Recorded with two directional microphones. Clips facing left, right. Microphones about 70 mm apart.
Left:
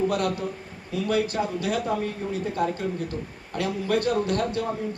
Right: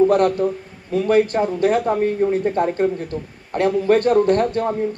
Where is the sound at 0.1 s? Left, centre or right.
Right.